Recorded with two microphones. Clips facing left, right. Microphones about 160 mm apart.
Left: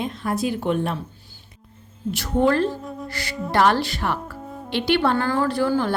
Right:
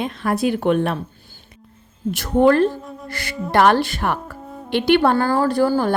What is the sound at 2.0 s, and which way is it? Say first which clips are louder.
Speech: right 5 dB; 50° right (ahead or behind).